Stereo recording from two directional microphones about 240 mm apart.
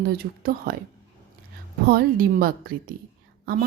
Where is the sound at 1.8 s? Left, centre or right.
Right.